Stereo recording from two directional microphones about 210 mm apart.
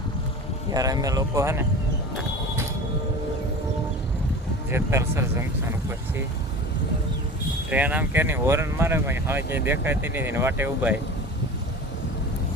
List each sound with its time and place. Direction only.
0.7 s speech: 15° right (ahead or behind)
4.7 s speech: 10° right (ahead or behind)
7.7 s speech: 5° right (ahead or behind)